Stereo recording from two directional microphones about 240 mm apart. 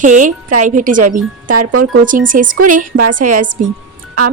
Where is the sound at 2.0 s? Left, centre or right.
Right.